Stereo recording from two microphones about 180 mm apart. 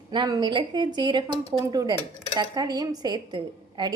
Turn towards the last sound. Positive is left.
turn(degrees=-25)  # may be behind; listen again after turning